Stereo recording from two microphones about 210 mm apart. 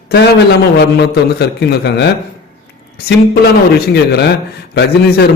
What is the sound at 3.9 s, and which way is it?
Speech, 50° left (ahead or behind).